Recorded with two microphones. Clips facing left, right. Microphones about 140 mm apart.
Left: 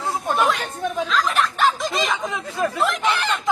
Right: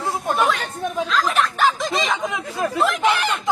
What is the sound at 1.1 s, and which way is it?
Speech, centre (ahead or behind).